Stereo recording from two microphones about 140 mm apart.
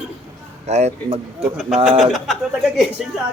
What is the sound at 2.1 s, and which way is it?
Speech, centre (ahead or behind).